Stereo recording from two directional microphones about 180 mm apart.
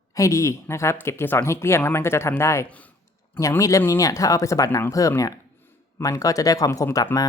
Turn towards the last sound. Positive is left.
turn(degrees=20)  # may be behind; listen again after turning